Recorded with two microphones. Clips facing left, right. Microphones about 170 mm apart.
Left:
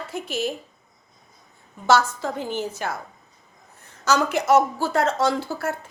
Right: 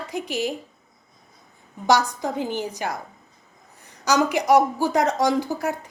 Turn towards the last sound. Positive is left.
turn(degrees=-15)  # may be behind; listen again after turning